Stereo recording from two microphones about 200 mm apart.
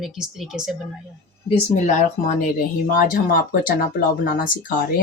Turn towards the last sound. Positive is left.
turn(degrees=45)  # may be behind; listen again after turning